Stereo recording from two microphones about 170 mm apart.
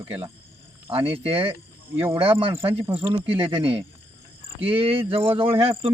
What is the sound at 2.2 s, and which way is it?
Speech, 35° right (ahead or behind).